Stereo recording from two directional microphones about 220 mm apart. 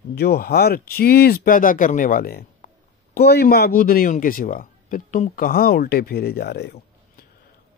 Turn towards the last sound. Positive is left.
turn(degrees=45)  # may be behind; listen again after turning